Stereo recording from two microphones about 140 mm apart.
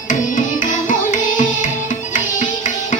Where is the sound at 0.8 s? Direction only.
65° left (ahead or behind).